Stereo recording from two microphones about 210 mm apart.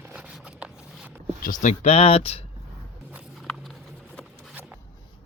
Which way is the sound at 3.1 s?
Centre (ahead or behind).